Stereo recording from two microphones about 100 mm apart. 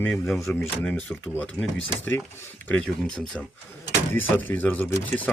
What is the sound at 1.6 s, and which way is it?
Speech, 25° left (ahead or behind).